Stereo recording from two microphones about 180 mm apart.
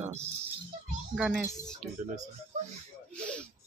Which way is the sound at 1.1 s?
Centre (ahead or behind).